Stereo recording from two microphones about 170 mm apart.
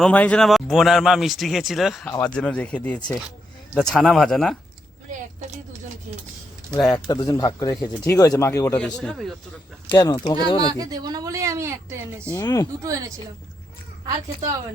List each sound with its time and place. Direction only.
0.0 s speech: 10° left (ahead or behind)
6.7 s speech: 5° left (ahead or behind)
6.9 s speech: 25° left (ahead or behind)
8.8 s speech: 5° left (ahead or behind)
9.9 s speech: 25° left (ahead or behind)
10.6 s speech: 20° right (ahead or behind)
12.3 s speech: 20° left (ahead or behind)
12.8 s speech: 20° right (ahead or behind)